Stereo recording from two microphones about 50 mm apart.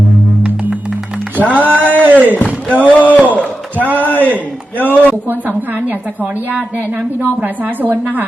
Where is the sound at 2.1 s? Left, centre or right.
Right.